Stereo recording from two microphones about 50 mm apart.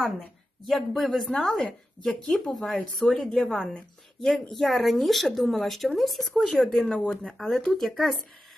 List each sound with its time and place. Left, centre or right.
0.6 s speech: centre
3.1 s speech: centre
6.9 s speech: centre
7.3 s speech: centre